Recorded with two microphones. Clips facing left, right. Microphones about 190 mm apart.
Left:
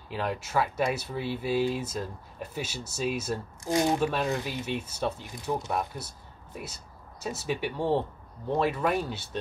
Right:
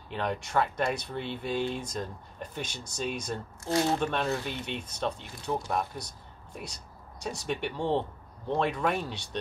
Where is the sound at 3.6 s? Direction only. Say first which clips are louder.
Left 2 dB; 15° left (ahead or behind).